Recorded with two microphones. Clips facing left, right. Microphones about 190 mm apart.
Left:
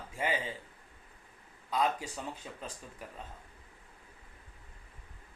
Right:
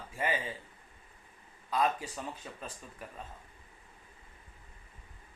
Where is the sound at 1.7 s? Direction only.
20° left (ahead or behind).